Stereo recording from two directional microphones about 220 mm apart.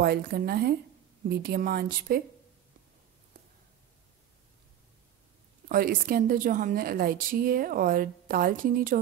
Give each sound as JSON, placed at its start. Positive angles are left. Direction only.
{"t": 0.0, "sound": "a woman's voice", "side_deg": -45}
{"t": 5.7, "sound": "a woman's voice", "side_deg": -40}